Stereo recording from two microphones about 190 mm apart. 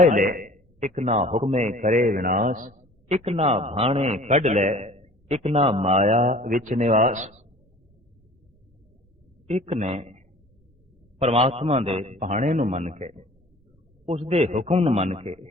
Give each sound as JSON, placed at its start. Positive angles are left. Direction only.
{"t": 0.0, "sound": "a man's voice", "side_deg": -45}
{"t": 9.5, "sound": "a man's voice", "side_deg": -35}